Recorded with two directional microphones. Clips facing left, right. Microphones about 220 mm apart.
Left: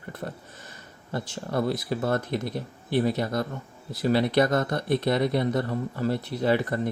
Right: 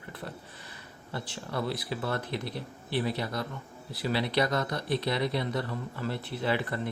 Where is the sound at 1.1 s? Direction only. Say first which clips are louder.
Left 6 dB; 45° left (ahead or behind).